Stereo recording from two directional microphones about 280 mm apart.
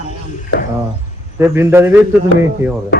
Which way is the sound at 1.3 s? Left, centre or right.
Centre.